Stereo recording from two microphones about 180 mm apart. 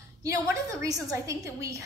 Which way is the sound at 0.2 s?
15° right (ahead or behind).